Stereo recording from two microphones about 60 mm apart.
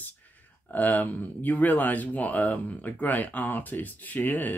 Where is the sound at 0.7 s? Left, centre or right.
Left.